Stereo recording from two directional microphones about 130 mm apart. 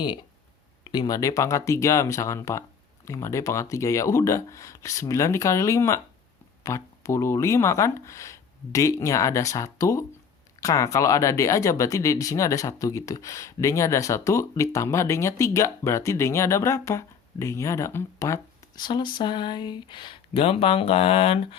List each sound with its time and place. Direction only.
0.9 s speech: 30° left (ahead or behind)
18.8 s speech: 35° left (ahead or behind)